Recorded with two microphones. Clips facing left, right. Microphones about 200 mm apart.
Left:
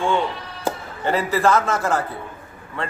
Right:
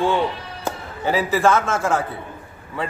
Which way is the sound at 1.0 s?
Centre (ahead or behind).